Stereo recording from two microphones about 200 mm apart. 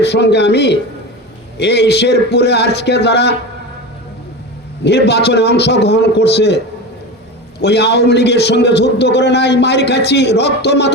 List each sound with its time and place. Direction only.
0.0 s a man's voice: 55° left (ahead or behind)
4.8 s a man's voice: 55° left (ahead or behind)
7.6 s a man's voice: 55° left (ahead or behind)